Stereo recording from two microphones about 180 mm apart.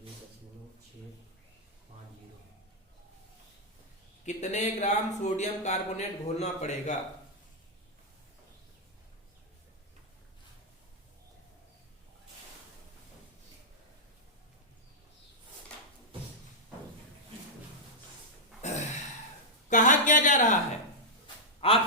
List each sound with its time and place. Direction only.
4.3 s speech: 40° left (ahead or behind)
18.6 s a sound: 40° left (ahead or behind)
21.6 s quack: 30° left (ahead or behind)